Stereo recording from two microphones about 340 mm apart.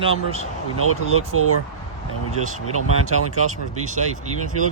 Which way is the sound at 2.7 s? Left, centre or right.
Right.